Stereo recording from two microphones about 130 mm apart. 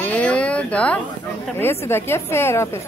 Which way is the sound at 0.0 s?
10° left (ahead or behind).